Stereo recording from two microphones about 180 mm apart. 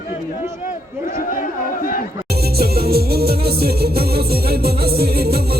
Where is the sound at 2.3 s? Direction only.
60° right (ahead or behind).